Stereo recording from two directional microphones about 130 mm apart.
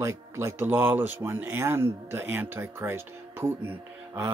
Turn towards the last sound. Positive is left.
turn(degrees=-20)  # may be behind; listen again after turning